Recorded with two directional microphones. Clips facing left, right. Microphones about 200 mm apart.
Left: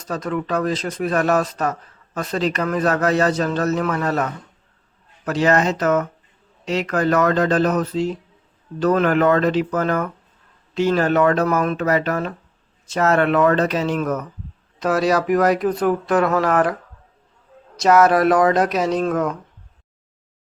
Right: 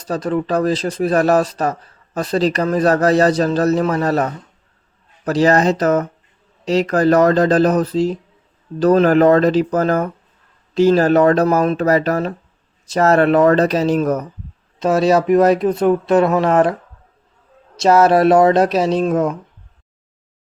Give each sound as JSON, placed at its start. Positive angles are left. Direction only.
{"t": 0.0, "sound": "a man's voice", "side_deg": -35}
{"t": 14.8, "sound": "speech", "side_deg": -25}
{"t": 17.7, "sound": "speech", "side_deg": -30}